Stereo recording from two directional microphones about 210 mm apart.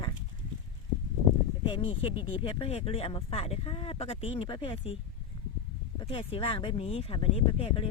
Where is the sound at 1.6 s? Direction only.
25° left (ahead or behind).